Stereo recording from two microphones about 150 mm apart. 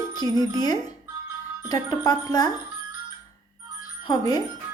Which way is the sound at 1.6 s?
25° left (ahead or behind).